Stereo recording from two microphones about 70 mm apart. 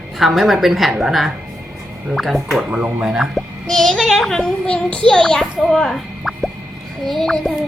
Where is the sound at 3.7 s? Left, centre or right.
Centre.